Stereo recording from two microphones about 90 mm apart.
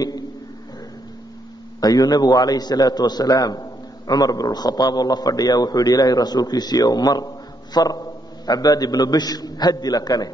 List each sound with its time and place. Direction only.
1.8 s a man's voice: 45° left (ahead or behind)